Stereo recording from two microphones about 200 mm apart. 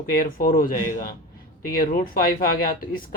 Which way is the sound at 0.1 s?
50° left (ahead or behind).